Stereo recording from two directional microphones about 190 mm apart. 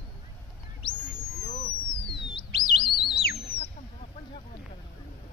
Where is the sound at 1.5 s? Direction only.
40° left (ahead or behind).